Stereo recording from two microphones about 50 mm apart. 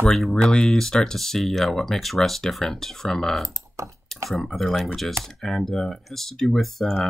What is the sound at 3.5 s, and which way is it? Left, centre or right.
Speech, right.